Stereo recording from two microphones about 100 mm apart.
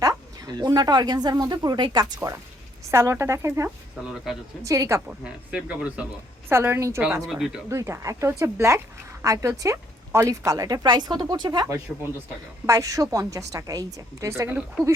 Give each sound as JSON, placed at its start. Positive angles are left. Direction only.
{"t": 0.0, "sound": "speech", "side_deg": -35}
{"t": 2.9, "sound": "speech", "side_deg": -25}
{"t": 4.0, "sound": "speech", "side_deg": -5}
{"t": 4.6, "sound": "speech", "side_deg": -30}
{"t": 5.0, "sound": "speech", "side_deg": -10}
{"t": 6.5, "sound": "speech", "side_deg": -25}
{"t": 7.3, "sound": "speech", "side_deg": -5}
{"t": 7.7, "sound": "speech", "side_deg": -30}
{"t": 12.6, "sound": "speech", "side_deg": -35}